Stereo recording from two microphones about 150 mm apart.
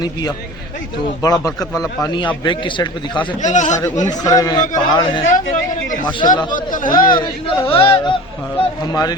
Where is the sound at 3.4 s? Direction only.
55° left (ahead or behind).